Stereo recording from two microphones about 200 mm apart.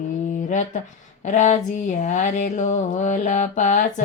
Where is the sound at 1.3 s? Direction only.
40° left (ahead or behind).